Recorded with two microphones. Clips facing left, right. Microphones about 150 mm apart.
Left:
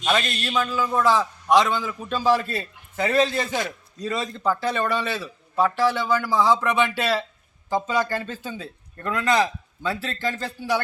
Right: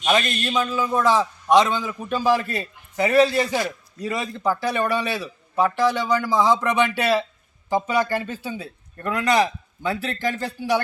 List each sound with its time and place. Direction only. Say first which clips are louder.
0.0 s speech: right 2 dB; 15° right (ahead or behind)